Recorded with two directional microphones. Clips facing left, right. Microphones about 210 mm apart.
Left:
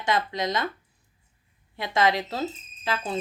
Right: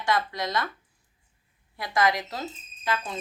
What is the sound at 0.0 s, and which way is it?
Speech, 20° left (ahead or behind).